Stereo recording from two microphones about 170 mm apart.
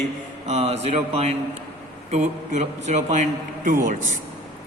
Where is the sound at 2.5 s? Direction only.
45° right (ahead or behind).